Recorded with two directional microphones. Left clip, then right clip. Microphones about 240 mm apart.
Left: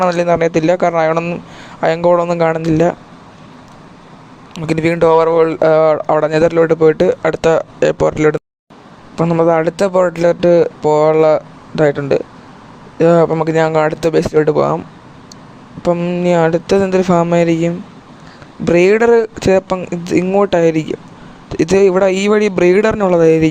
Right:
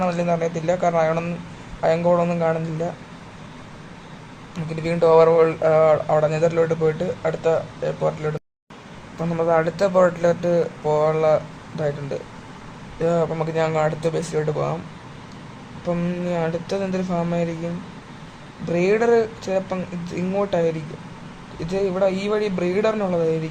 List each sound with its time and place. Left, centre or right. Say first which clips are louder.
0.0 s speech: left 9 dB; left
4.5 s speech: left 11 dB; left
15.9 s speech: left 11 dB; left